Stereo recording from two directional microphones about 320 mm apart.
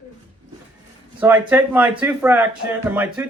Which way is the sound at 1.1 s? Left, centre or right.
Centre.